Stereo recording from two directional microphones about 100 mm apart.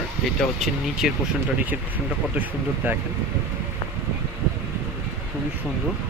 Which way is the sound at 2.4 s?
15° right (ahead or behind).